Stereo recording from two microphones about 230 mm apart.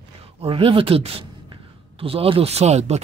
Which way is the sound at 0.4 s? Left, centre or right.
Right.